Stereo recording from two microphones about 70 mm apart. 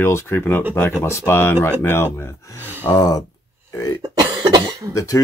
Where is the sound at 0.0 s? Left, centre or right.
Left.